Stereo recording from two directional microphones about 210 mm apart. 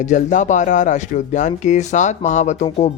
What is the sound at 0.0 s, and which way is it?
Speech, 35° left (ahead or behind).